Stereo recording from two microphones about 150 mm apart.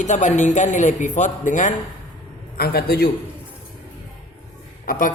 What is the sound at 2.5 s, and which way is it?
Speech, 90° left.